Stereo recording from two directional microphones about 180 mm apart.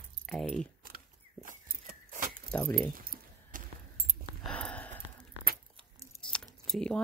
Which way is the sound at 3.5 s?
50° right (ahead or behind).